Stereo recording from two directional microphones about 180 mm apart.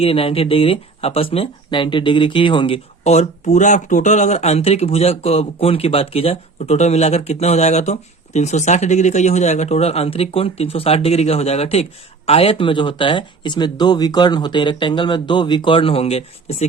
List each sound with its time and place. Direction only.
0.0 s speech: 30° left (ahead or behind)